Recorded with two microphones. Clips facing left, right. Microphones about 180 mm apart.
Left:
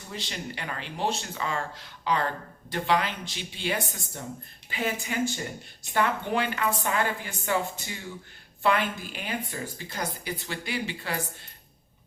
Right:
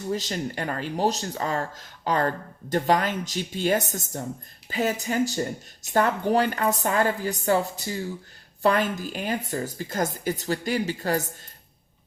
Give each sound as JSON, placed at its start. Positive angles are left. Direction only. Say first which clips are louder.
{"t": 0.1, "sound": "speech", "louder": "right 8 dB", "side_deg": -45}